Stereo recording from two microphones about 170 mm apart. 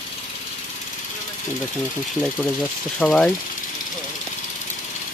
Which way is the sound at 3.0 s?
5° left (ahead or behind).